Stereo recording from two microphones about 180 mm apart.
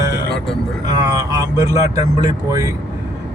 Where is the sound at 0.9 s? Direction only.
20° right (ahead or behind).